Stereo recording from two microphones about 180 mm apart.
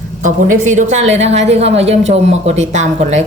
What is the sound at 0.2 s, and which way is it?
A woman's voice, 45° right (ahead or behind).